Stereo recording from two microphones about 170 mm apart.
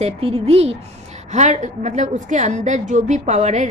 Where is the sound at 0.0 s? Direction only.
35° right (ahead or behind).